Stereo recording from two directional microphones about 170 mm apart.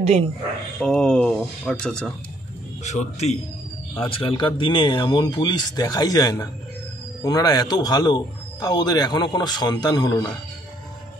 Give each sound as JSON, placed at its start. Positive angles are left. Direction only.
{"t": 0.0, "sound": "speech", "side_deg": -35}
{"t": 0.7, "sound": "speech", "side_deg": 5}
{"t": 2.8, "sound": "a man's voice", "side_deg": 45}
{"t": 4.2, "sound": "speech", "side_deg": 30}